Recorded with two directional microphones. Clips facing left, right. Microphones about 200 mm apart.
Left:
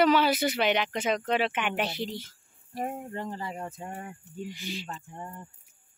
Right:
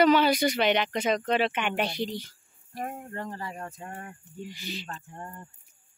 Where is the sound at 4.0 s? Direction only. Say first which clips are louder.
Left 2 dB; 5° left (ahead or behind).